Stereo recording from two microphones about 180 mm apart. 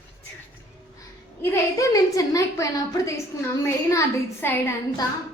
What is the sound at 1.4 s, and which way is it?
A woman's voice, 20° left (ahead or behind).